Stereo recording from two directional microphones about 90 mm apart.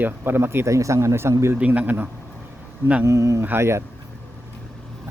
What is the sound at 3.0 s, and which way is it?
Speech, 35° right (ahead or behind).